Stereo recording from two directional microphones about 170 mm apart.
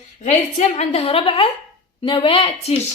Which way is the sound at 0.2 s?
45° left (ahead or behind).